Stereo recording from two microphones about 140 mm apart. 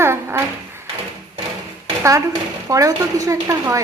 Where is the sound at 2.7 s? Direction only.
25° right (ahead or behind).